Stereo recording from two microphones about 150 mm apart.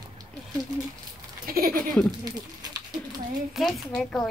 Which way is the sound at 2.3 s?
25° right (ahead or behind).